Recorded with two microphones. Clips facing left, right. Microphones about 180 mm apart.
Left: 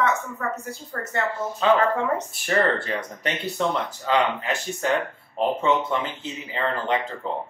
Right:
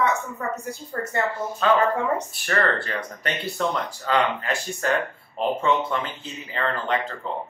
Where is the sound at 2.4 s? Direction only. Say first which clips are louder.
Left 3 dB; 20° left (ahead or behind).